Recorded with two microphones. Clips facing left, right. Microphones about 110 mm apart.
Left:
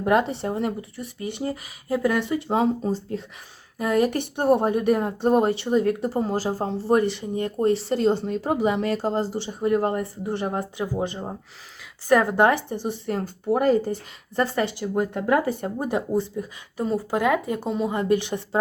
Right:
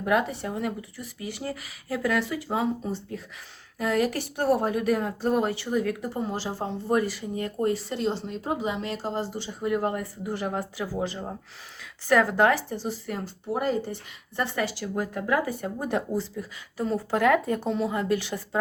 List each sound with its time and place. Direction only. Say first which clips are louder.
0.0 s speech: left 4 dB; 30° left (ahead or behind)
3.8 s speech: left 4 dB; 20° left (ahead or behind)
8.0 s speech: left 6 dB; 55° left (ahead or behind)
9.3 s speech: left 5 dB; 25° left (ahead or behind)
13.2 s speech: left 7 dB; 50° left (ahead or behind)
14.3 s speech: left 6 dB; 40° left (ahead or behind)
14.6 s speech: left 4 dB; 25° left (ahead or behind)
15.8 s speech: left 3 dB; 15° left (ahead or behind)